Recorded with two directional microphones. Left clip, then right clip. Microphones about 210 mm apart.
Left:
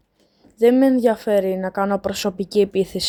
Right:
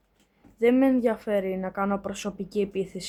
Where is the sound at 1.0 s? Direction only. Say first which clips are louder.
Left 8 dB; 25° left (ahead or behind).